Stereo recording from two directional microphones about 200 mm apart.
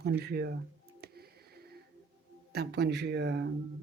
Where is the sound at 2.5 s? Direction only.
55° right (ahead or behind).